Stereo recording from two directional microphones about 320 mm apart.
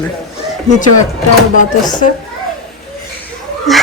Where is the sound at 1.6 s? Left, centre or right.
Left.